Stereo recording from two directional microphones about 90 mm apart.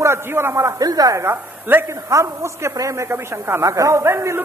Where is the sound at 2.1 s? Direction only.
35° right (ahead or behind).